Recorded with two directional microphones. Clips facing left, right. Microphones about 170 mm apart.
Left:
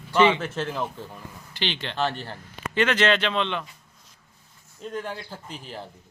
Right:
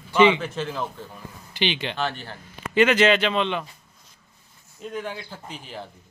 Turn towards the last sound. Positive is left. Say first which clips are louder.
# even
turn(degrees=35)  # may be behind; listen again after turning